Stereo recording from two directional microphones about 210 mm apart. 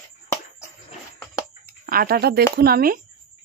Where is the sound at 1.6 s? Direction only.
45° right (ahead or behind).